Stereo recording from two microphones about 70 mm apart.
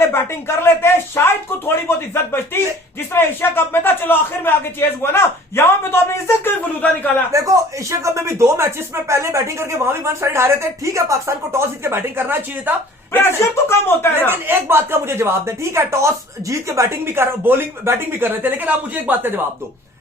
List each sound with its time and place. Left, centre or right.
0.1 s a man's voice: left
7.3 s speech: right
13.1 s a man's voice: left
14.3 s speech: right